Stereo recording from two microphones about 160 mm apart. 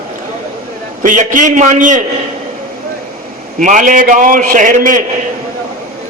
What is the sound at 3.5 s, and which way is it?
A man's voice, 55° right (ahead or behind).